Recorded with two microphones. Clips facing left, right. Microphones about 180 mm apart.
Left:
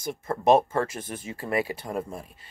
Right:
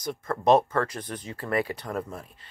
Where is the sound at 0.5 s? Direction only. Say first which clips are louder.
Even; 10° left (ahead or behind).